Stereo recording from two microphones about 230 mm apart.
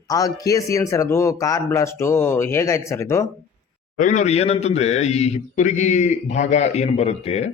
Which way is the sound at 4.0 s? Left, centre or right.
Left.